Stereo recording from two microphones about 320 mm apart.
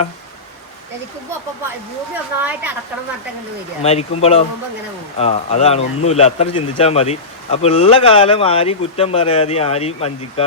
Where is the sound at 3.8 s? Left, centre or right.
Centre.